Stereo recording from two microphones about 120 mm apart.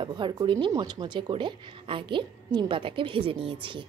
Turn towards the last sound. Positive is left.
turn(degrees=-50)  # may be behind; listen again after turning